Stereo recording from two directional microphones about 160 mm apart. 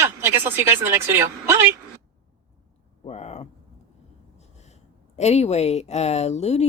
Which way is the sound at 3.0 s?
40° left (ahead or behind).